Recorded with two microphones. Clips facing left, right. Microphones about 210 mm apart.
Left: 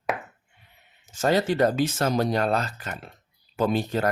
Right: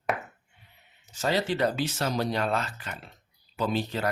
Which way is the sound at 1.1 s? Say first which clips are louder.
Left 5 dB; 50° left (ahead or behind).